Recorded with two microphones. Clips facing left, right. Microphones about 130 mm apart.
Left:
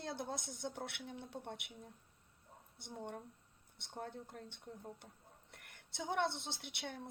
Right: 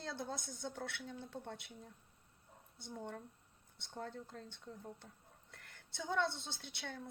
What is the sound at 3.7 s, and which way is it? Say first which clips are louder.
Speech: even; 25° left (ahead or behind).